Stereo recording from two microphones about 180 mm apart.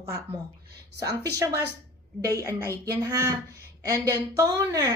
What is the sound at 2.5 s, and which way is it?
A woman's voice, 15° right (ahead or behind).